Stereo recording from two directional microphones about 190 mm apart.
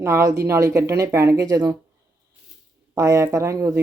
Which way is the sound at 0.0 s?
15° right (ahead or behind).